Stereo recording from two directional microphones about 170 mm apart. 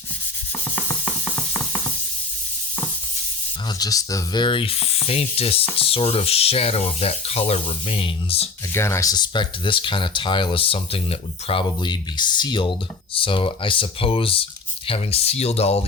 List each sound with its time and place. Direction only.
3.7 s speech: 20° left (ahead or behind)
8.7 s speech: 15° left (ahead or behind); by 15.8 s 35° left (ahead or behind)